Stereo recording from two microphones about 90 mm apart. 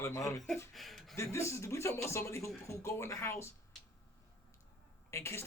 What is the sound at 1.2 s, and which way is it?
A man's voice, 35° left (ahead or behind).